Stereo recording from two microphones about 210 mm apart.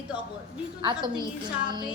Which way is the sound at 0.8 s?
20° right (ahead or behind).